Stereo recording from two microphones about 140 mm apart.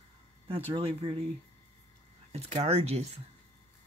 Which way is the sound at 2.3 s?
50° right (ahead or behind).